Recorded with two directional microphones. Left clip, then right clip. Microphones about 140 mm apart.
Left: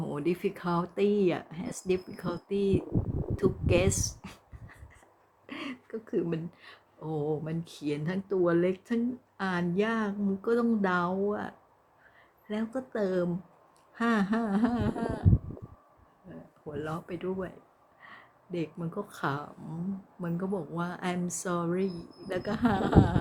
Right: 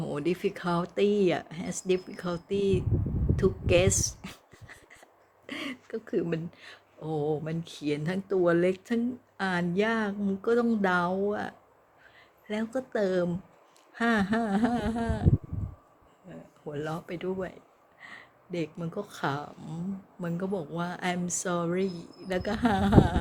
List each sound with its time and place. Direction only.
0.0 s speech: 20° left (ahead or behind)
3.3 s a sound: 15° left (ahead or behind)
6.1 s speech: 15° left (ahead or behind)
16.3 s speech: 20° left (ahead or behind)